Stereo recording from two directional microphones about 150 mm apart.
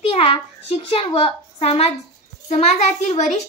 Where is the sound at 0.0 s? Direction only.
40° left (ahead or behind).